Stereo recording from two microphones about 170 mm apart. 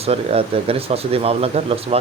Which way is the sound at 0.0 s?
35° right (ahead or behind).